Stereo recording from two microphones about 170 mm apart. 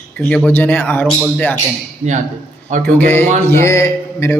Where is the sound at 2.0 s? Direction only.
45° right (ahead or behind).